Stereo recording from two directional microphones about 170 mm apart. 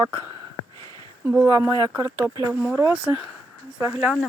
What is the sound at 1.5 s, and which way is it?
Speech, 15° right (ahead or behind).